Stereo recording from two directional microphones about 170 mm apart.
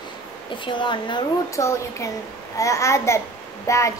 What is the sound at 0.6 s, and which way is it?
Speech, 30° left (ahead or behind).